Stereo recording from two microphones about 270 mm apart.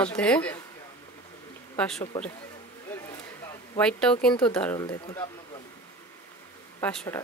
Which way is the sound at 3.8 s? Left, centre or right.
Centre.